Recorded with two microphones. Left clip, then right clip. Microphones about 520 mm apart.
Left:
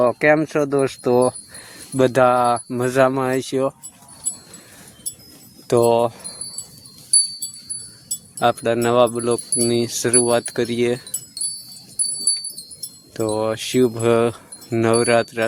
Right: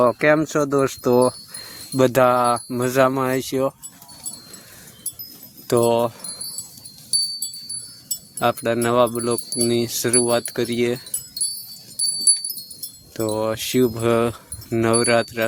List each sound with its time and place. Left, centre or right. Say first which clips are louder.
0.0 s wind chime: left 1 dB; right
2.0 s speech: left 1 dB; right
5.6 s speech: left 2 dB; right
8.4 s speech: left 2 dB; right
13.1 s speech: left 1 dB; right